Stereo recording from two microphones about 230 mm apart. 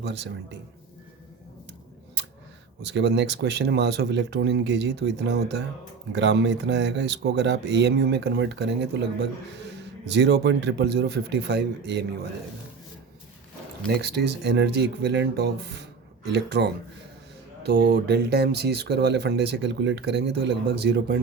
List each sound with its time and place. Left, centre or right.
0.0 s speech: right
2.8 s speech: right
13.9 s speech: right
17.7 s speech: right